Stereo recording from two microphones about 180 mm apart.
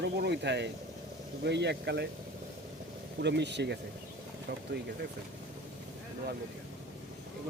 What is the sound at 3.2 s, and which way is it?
Speech, 70° right (ahead or behind).